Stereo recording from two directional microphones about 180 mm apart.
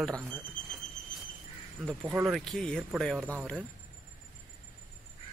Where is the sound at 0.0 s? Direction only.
5° left (ahead or behind).